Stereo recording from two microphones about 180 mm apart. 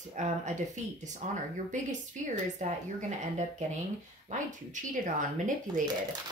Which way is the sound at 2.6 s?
40° right (ahead or behind).